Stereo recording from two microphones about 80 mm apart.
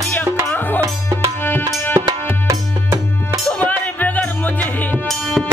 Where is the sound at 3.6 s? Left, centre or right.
Left.